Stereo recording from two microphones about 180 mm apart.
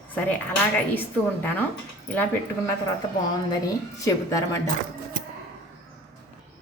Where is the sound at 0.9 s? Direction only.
10° left (ahead or behind).